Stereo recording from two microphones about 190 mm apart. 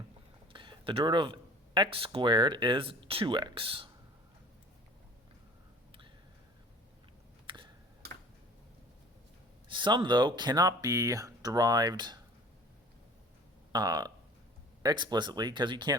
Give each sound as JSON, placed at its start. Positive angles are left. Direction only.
{"t": 0.5, "sound": "speech", "side_deg": -25}
{"t": 7.4, "sound": "a sound", "side_deg": -25}
{"t": 9.6, "sound": "speech", "side_deg": -25}
{"t": 13.7, "sound": "speech", "side_deg": -20}